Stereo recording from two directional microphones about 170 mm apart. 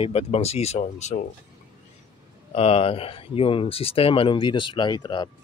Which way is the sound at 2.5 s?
35° left (ahead or behind).